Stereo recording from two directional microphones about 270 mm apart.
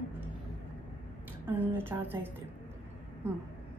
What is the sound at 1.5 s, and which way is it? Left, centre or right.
Speech, centre.